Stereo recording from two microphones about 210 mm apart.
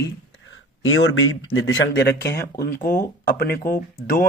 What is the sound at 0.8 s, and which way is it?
Speech, 70° left (ahead or behind).